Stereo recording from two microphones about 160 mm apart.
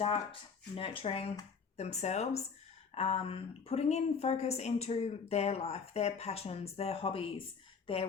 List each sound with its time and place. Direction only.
0.0 s a woman's voice: 35° left (ahead or behind)